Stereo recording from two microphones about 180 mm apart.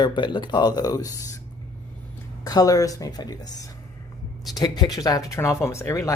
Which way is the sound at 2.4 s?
20° left (ahead or behind).